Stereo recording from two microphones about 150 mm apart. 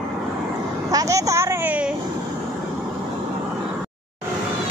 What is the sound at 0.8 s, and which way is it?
Vehicle, 20° right (ahead or behind).